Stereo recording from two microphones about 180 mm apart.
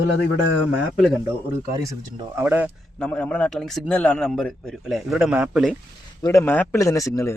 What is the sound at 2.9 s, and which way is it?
A man's voice, 5° left (ahead or behind).